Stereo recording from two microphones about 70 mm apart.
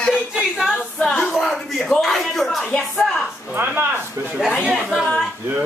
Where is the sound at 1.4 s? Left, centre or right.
Centre.